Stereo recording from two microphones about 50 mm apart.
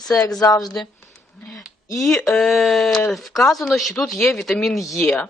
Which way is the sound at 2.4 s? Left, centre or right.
Centre.